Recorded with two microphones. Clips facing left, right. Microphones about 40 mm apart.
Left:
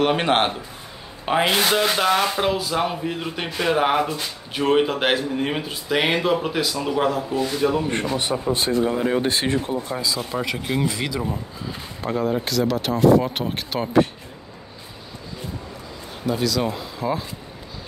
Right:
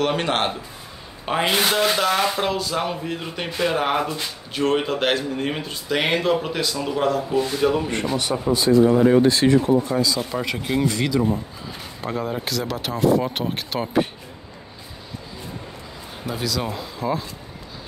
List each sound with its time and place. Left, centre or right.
0.0 s speech: centre
1.2 s speech: centre
8.2 s speech: left
8.5 s speech: left
8.8 s speech: centre
9.2 s speech: left
9.9 s speech: centre
16.3 s speech: centre